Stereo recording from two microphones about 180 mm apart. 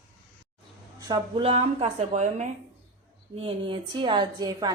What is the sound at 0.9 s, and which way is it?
A woman's voice, 20° right (ahead or behind).